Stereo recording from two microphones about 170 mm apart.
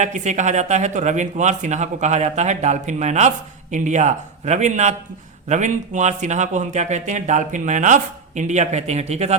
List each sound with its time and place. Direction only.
0.0 s speech: 45° right (ahead or behind)